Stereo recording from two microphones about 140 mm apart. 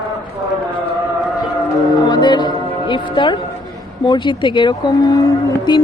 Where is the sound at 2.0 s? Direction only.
30° left (ahead or behind).